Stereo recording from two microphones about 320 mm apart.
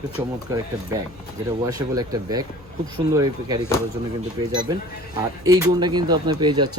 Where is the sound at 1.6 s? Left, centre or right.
Centre.